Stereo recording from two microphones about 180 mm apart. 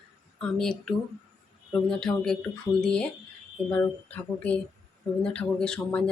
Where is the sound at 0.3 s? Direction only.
5° left (ahead or behind).